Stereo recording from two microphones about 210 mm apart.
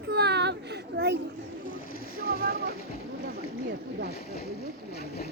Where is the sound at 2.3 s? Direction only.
45° right (ahead or behind).